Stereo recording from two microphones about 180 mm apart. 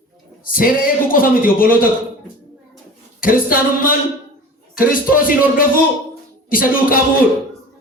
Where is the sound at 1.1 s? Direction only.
50° left (ahead or behind).